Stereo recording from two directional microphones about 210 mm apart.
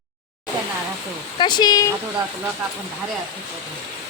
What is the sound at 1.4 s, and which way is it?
Speech, 20° left (ahead or behind).